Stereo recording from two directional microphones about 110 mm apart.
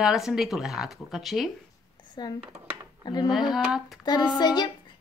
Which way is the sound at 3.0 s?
40° left (ahead or behind).